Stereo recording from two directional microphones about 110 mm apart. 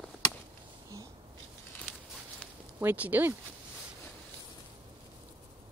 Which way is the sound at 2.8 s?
15° right (ahead or behind).